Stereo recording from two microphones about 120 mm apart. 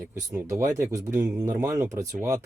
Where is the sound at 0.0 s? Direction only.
25° right (ahead or behind).